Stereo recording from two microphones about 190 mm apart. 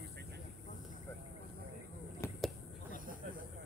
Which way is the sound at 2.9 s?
45° right (ahead or behind).